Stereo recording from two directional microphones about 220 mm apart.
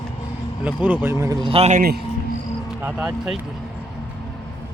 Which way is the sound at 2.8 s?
5° right (ahead or behind).